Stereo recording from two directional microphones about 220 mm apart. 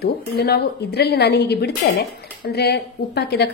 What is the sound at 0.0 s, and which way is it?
A woman's voice, 45° left (ahead or behind).